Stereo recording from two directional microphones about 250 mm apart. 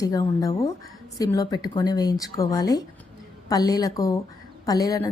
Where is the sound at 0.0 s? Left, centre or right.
Centre.